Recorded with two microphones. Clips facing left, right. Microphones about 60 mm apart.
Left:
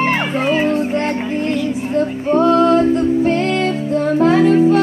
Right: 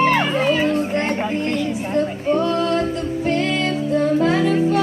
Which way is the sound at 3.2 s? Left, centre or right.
Left.